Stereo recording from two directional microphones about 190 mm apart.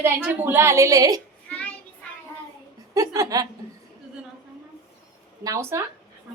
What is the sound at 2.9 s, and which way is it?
Speech, 20° right (ahead or behind).